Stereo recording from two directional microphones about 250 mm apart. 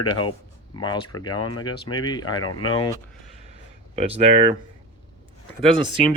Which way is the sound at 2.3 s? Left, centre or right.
Left.